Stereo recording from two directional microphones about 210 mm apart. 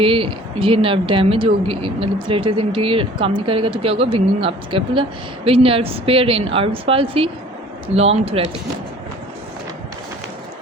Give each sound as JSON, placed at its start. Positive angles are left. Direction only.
{"t": 0.0, "sound": "speech", "side_deg": -25}